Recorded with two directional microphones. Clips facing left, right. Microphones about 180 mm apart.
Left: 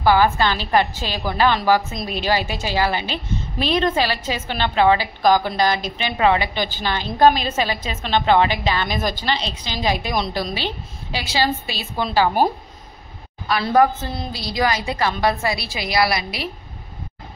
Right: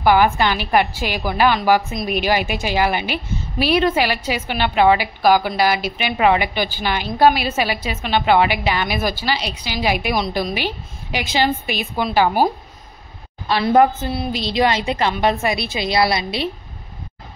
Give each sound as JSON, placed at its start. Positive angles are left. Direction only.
{"t": 0.0, "sound": "a woman's voice", "side_deg": -15}
{"t": 14.3, "sound": "a woman's voice", "side_deg": -25}